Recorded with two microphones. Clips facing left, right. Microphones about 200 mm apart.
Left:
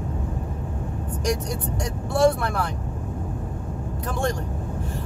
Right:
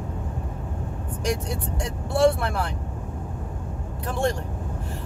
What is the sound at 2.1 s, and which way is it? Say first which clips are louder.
Speech: even; 30° right (ahead or behind).